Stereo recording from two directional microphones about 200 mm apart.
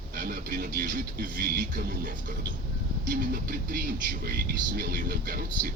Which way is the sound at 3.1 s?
45° right (ahead or behind).